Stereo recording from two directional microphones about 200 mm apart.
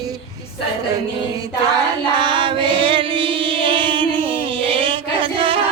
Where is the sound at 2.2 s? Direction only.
25° right (ahead or behind).